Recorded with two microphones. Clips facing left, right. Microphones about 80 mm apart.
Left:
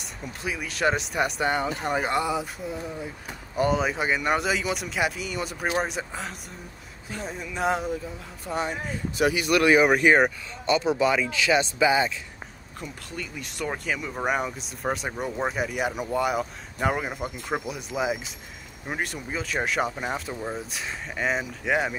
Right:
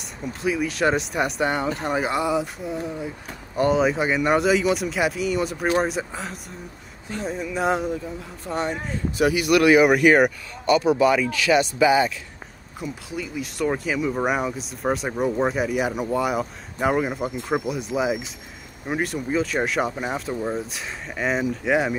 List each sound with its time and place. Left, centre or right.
0.2 s speech: centre
9.2 s speech: left
12.8 s speech: centre